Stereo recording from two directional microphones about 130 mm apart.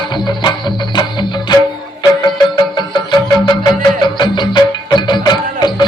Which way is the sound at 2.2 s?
35° left (ahead or behind).